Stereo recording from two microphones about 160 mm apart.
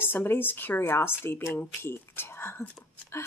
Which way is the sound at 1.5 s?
15° left (ahead or behind).